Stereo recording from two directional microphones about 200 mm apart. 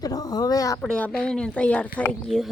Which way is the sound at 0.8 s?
5° left (ahead or behind).